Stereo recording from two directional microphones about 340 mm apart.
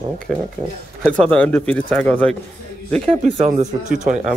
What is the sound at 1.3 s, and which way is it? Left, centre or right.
Speech, centre.